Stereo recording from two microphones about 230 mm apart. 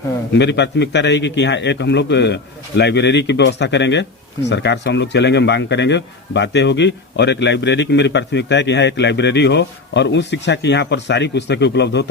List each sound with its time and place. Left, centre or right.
0.3 s speech: left